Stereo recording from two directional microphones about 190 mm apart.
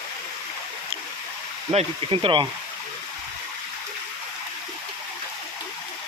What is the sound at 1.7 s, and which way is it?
Speech, 25° right (ahead or behind).